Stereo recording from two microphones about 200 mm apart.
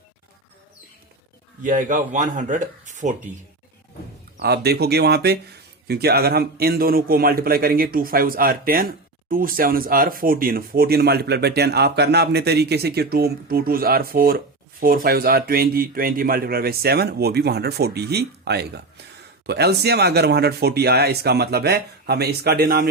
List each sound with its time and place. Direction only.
1.6 s speech: 40° right (ahead or behind)
4.4 s speech: 55° right (ahead or behind)